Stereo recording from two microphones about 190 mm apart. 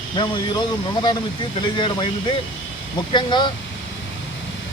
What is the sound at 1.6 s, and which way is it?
Speech, 25° left (ahead or behind).